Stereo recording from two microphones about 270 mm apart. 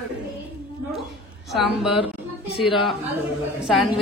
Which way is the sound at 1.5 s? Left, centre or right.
Centre.